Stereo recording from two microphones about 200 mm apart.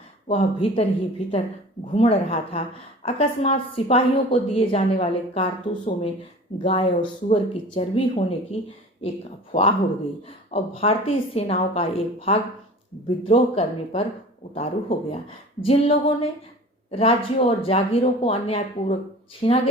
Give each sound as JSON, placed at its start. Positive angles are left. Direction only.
{"t": 0.3, "sound": "a woman's voice", "side_deg": 30}
{"t": 1.9, "sound": "a woman's voice", "side_deg": 30}